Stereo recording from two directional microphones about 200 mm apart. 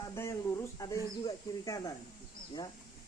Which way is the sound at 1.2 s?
15° left (ahead or behind).